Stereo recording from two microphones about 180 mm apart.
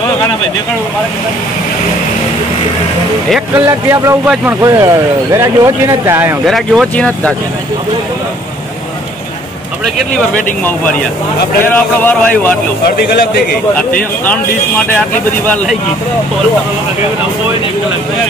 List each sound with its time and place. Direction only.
3.5 s speech: 15° right (ahead or behind)
6.4 s speech: centre (ahead or behind)
11.6 s speech: 10° left (ahead or behind)
15.4 s speech: 10° left (ahead or behind)